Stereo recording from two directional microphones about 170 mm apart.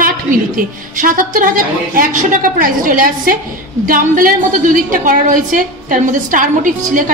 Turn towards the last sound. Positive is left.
turn(degrees=-50)  # may be behind; listen again after turning